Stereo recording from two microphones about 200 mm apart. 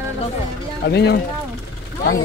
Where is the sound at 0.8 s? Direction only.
55° left (ahead or behind).